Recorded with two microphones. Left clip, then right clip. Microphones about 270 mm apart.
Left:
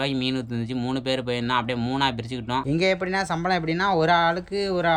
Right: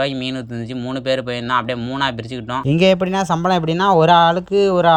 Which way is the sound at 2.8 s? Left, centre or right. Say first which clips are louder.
Right 10 dB; right.